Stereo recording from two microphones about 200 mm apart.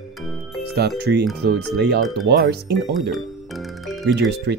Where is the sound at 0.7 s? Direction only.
55° right (ahead or behind).